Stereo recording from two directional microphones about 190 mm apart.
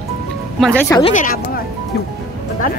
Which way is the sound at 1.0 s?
45° left (ahead or behind).